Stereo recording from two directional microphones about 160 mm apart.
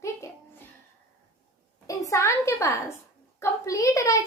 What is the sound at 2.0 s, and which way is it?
A woman's voice, 20° left (ahead or behind).